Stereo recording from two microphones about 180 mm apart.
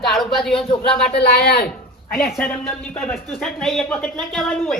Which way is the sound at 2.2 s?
5° left (ahead or behind).